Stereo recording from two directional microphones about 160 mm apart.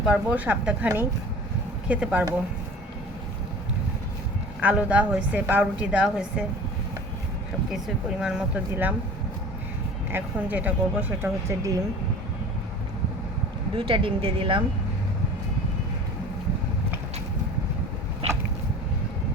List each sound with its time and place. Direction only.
0.0 s a woman's voice: 5° right (ahead or behind)
4.6 s a woman's voice: 10° right (ahead or behind)
8.2 s a woman's voice: 5° right (ahead or behind)
10.1 s a woman's voice: 10° right (ahead or behind)
13.7 s speech: 35° right (ahead or behind)